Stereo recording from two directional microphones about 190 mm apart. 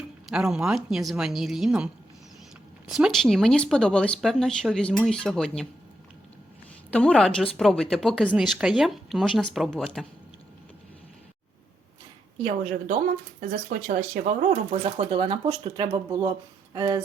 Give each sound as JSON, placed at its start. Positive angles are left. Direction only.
{"t": 0.3, "sound": "a woman's voice", "side_deg": -5}
{"t": 2.9, "sound": "a woman's voice", "side_deg": 0}
{"t": 6.9, "sound": "a woman's voice", "side_deg": 5}
{"t": 12.4, "sound": "a woman's voice", "side_deg": -35}
{"t": 13.4, "sound": "speech", "side_deg": -45}
{"t": 14.7, "sound": "speech", "side_deg": -35}